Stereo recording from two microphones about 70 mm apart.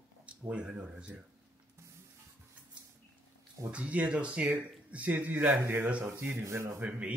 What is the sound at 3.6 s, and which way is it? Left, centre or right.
Speech, centre.